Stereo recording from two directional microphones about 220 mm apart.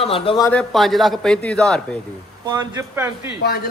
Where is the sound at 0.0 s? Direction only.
25° left (ahead or behind).